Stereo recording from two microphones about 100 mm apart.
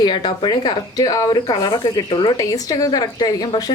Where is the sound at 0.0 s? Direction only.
50° left (ahead or behind).